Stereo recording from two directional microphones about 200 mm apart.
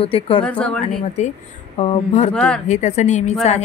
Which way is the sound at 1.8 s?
30° left (ahead or behind).